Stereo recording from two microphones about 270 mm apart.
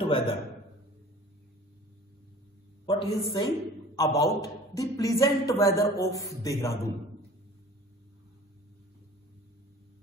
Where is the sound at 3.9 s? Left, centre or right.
Centre.